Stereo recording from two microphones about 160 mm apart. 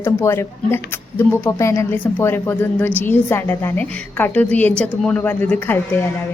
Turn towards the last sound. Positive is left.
turn(degrees=10)  # may be behind; listen again after turning